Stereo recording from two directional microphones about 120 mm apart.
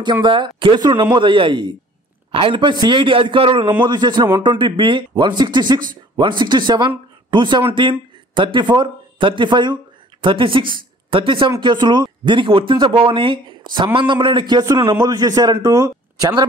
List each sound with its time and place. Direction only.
0.0 s speech: 40° right (ahead or behind)